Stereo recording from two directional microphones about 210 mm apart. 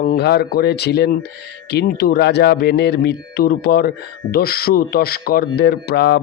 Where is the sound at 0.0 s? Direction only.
45° left (ahead or behind).